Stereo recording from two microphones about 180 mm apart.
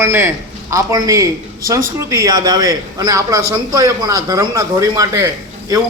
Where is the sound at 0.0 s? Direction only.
15° right (ahead or behind).